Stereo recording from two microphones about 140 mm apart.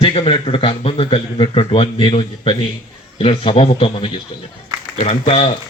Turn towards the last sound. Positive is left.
turn(degrees=45)  # may be behind; listen again after turning